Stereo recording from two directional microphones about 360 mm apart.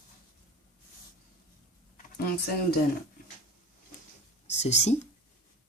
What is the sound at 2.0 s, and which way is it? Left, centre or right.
Speech, left.